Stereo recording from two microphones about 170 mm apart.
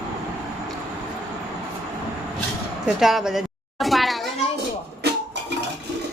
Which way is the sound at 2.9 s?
Centre (ahead or behind).